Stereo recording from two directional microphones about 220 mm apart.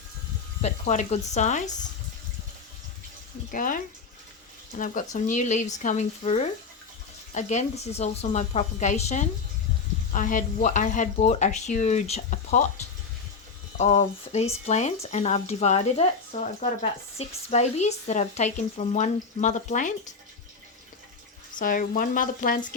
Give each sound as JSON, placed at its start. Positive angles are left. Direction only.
{"t": 0.6, "sound": "speech", "side_deg": 30}
{"t": 3.5, "sound": "speech", "side_deg": 40}
{"t": 13.7, "sound": "speech", "side_deg": 30}
{"t": 21.6, "sound": "speech", "side_deg": 40}